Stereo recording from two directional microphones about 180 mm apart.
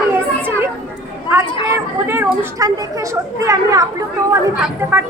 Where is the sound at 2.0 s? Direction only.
10° right (ahead or behind).